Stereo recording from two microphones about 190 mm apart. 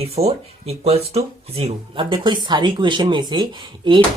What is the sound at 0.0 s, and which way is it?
Speech, 35° right (ahead or behind).